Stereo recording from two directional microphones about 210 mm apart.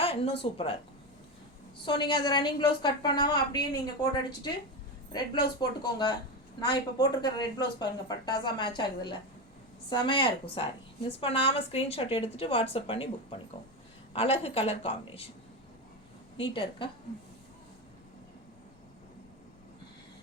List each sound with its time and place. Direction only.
0.0 s a woman's voice: 25° left (ahead or behind)
1.8 s a woman's voice: 20° left (ahead or behind)
5.5 s a woman's voice: 20° left (ahead or behind)
16.4 s a woman's voice: 25° left (ahead or behind)